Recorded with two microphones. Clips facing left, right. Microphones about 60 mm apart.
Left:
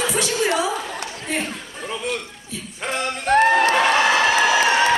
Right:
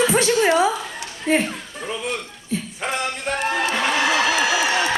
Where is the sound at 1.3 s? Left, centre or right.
Right.